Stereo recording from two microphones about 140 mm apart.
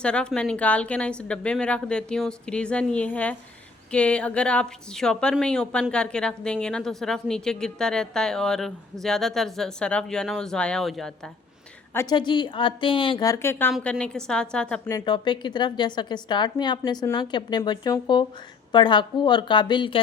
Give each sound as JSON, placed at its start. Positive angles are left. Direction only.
{"t": 0.0, "sound": "a woman's voice", "side_deg": 5}
{"t": 11.9, "sound": "a woman's voice", "side_deg": 30}
{"t": 13.2, "sound": "a woman's voice", "side_deg": 20}
{"t": 14.8, "sound": "a woman's voice", "side_deg": 30}